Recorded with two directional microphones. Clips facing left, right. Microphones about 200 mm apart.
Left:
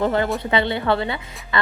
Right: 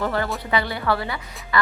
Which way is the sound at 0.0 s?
20° left (ahead or behind).